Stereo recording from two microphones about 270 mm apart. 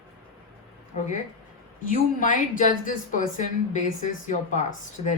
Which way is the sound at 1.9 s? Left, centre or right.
Left.